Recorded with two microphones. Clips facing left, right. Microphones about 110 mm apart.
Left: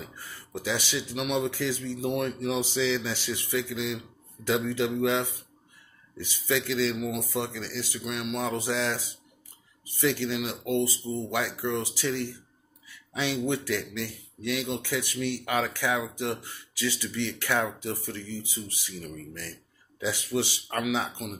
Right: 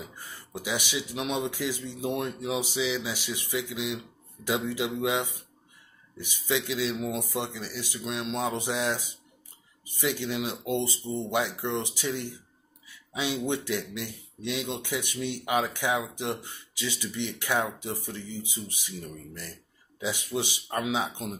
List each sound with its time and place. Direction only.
0.0 s speech: 15° right (ahead or behind)